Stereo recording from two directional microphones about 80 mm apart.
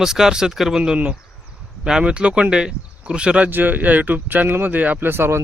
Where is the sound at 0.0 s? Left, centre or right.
Centre.